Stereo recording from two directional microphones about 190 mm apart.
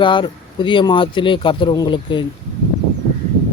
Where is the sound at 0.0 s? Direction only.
25° left (ahead or behind).